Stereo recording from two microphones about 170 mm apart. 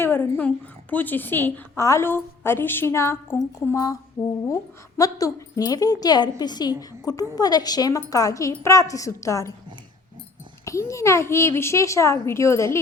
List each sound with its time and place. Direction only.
0.0 s a woman's voice: 10° left (ahead or behind)
10.7 s a woman's voice: 15° left (ahead or behind)